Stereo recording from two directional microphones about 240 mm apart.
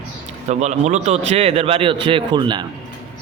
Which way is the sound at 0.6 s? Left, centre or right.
Right.